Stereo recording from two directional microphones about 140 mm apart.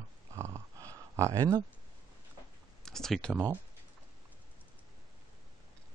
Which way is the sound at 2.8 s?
5° left (ahead or behind).